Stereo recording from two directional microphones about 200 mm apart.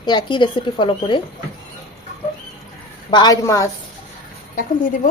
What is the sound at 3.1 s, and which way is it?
Speech, 20° left (ahead or behind).